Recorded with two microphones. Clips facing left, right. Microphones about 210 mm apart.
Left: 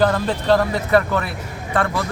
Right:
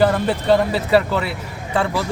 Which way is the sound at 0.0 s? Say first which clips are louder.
Right 1 dB; 10° right (ahead or behind).